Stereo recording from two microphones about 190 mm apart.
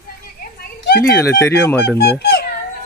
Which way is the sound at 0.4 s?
55° left (ahead or behind).